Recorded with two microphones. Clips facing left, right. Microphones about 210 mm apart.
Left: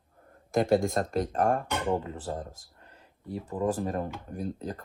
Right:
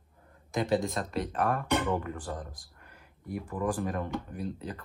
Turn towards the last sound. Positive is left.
turn(degrees=45)  # may be behind; listen again after turning